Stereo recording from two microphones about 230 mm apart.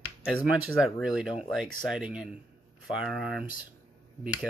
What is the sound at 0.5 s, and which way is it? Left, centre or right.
Speech, centre.